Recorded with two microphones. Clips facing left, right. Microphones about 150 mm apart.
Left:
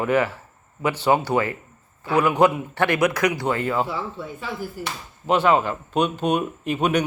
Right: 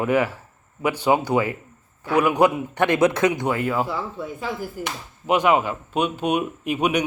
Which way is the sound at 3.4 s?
10° right (ahead or behind).